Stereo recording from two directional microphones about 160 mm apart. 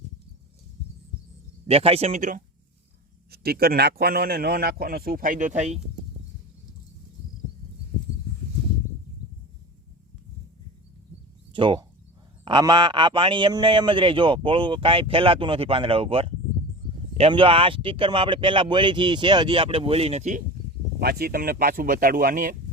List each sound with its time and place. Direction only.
1.6 s a man's voice: 40° right (ahead or behind)
3.3 s a man's voice: 75° right (ahead or behind); by 5.8 s 45° right (ahead or behind)
11.5 s a man's voice: 30° right (ahead or behind); by 20.4 s 45° right (ahead or behind)
21.0 s speech: 80° right; by 22.5 s 60° right (ahead or behind)